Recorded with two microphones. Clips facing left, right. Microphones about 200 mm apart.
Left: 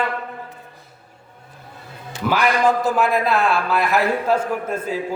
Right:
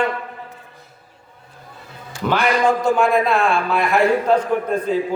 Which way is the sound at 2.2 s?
5° left (ahead or behind).